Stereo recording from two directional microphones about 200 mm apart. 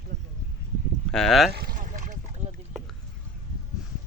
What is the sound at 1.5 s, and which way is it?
Boat, 50° right (ahead or behind).